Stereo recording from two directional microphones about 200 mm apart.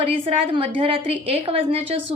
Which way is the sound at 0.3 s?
25° right (ahead or behind).